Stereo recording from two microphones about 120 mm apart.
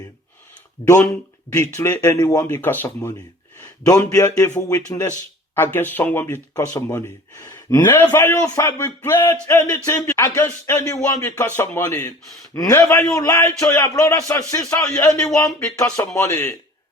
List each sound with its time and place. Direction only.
0.8 s speech: 35° left (ahead or behind)
1.5 s speech: 20° left (ahead or behind)
3.8 s speech: 30° left (ahead or behind)
5.5 s speech: 15° left (ahead or behind)
12.5 s speech: 30° left (ahead or behind)